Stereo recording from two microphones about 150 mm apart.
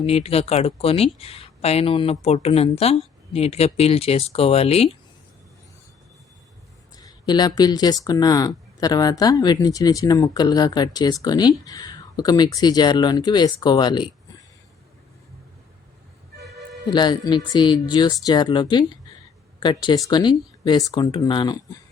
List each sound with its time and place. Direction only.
0.0 s speech: 40° left (ahead or behind)
6.9 s speech: 25° left (ahead or behind)
16.9 s speech: 30° left (ahead or behind)